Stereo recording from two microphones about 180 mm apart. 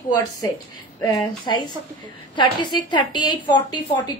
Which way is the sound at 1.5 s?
25° left (ahead or behind).